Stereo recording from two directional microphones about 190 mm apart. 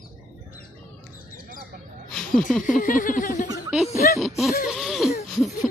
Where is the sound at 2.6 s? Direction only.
45° left (ahead or behind).